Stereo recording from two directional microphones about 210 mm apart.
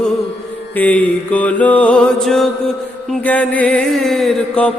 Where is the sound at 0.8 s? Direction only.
5° left (ahead or behind).